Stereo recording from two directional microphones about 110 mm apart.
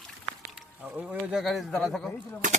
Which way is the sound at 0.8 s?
15° right (ahead or behind).